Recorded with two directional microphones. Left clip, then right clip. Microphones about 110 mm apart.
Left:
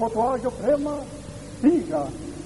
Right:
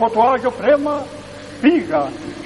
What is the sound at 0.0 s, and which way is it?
A man's voice, 30° left (ahead or behind).